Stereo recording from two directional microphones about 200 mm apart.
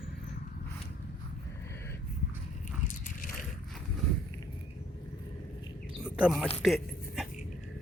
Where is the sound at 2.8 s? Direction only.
40° left (ahead or behind).